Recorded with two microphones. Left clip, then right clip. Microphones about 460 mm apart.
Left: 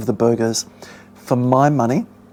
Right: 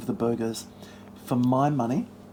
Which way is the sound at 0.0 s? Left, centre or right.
Left.